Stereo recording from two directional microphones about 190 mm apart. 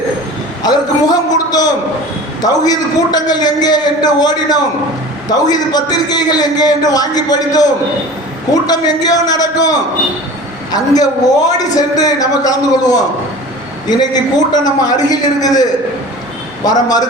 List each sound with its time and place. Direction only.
0.6 s a man's voice: 20° left (ahead or behind)